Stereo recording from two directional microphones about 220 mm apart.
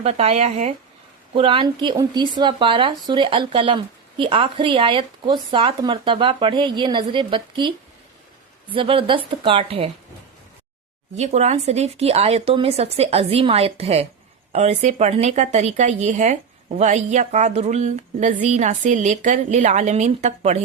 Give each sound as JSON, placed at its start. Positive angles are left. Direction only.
{"t": 0.0, "sound": "speech", "side_deg": -30}
{"t": 8.7, "sound": "speech", "side_deg": -25}
{"t": 11.2, "sound": "speech", "side_deg": -30}